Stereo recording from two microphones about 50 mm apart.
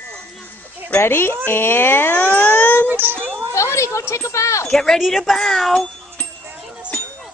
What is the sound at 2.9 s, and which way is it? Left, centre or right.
Children playing, right.